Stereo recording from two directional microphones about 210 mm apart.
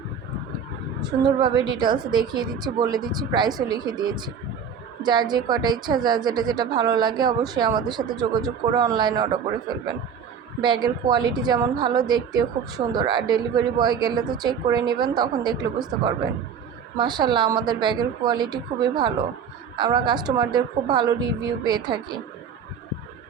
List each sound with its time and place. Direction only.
1.2 s a woman's voice: 20° right (ahead or behind)